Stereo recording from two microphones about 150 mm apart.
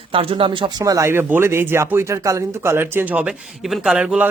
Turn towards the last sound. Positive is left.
turn(degrees=-5)  # may be behind; listen again after turning